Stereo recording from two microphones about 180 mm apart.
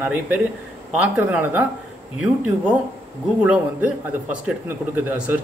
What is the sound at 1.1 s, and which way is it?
Speech, 10° right (ahead or behind).